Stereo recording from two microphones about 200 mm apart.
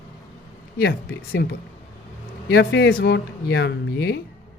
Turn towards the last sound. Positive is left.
turn(degrees=55)  # may be behind; listen again after turning